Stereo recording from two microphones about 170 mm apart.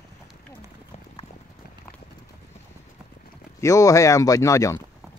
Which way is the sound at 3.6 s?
20° left (ahead or behind).